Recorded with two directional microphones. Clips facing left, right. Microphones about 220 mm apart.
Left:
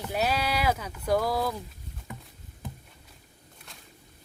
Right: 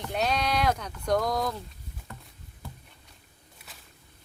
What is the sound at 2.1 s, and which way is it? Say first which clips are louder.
Rowboat: left 4 dB; 15° left (ahead or behind).